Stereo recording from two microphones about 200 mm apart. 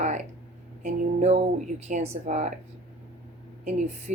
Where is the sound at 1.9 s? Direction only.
40° right (ahead or behind).